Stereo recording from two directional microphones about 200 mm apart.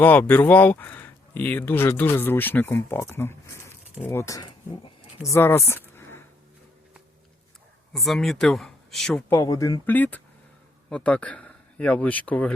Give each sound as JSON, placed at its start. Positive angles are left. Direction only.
{"t": 0.0, "sound": "speech", "side_deg": 10}
{"t": 7.9, "sound": "speech", "side_deg": 0}
{"t": 9.3, "sound": "speech", "side_deg": 15}